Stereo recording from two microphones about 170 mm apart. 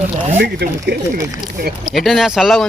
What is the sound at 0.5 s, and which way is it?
Speech, 75° right (ahead or behind).